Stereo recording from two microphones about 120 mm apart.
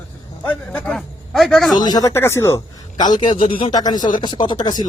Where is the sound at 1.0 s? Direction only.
Centre (ahead or behind).